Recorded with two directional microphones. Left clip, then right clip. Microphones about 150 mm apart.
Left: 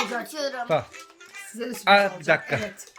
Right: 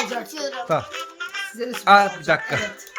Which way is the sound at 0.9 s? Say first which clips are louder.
Right 13 dB; 90° right.